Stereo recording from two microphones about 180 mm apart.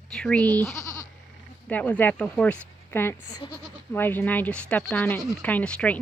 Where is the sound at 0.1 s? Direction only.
5° left (ahead or behind).